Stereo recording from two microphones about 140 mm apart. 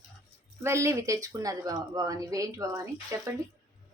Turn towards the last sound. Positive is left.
turn(degrees=-20)  # may be behind; listen again after turning